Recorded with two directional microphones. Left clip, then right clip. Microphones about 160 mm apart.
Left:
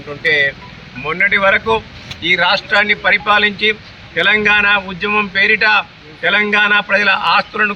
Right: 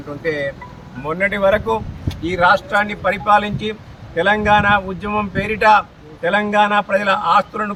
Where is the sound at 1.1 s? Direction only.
5° right (ahead or behind).